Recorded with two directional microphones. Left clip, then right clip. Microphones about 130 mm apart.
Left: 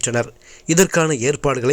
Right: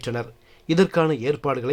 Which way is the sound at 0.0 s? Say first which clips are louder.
Left 8 dB; 25° left (ahead or behind).